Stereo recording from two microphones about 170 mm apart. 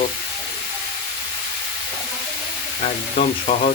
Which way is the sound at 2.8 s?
45° left (ahead or behind).